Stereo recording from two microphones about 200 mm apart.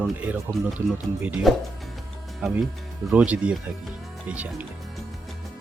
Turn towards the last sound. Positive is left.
turn(degrees=-5)  # may be behind; listen again after turning